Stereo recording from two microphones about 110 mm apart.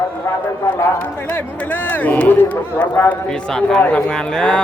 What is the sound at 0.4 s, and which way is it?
Speech, 20° left (ahead or behind).